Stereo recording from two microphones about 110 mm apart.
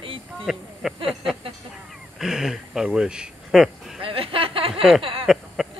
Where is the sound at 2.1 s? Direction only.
5° right (ahead or behind).